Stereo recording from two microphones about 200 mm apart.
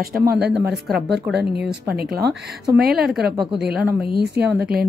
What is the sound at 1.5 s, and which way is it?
Speech, 50° right (ahead or behind).